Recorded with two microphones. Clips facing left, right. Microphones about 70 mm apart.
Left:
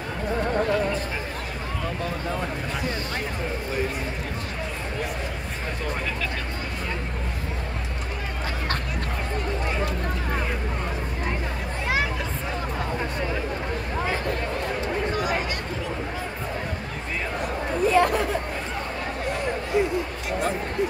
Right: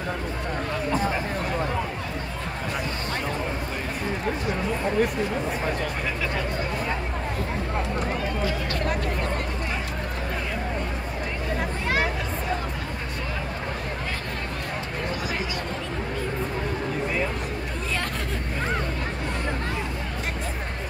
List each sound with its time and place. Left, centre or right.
17.9 s hubbub: centre